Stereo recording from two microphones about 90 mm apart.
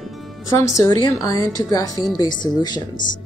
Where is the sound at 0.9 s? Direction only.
45° left (ahead or behind).